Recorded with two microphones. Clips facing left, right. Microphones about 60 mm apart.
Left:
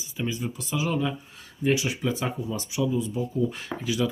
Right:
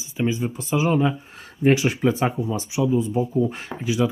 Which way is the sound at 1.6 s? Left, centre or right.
Right.